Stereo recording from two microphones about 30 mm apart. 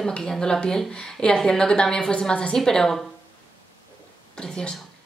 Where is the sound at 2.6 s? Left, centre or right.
Centre.